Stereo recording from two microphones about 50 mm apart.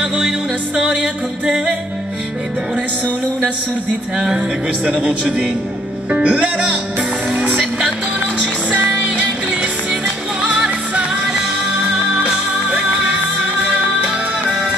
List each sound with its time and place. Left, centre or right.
0.0 s music: centre
4.8 s speech: right
6.0 s music: right
8.7 s music: right
11.8 s music: right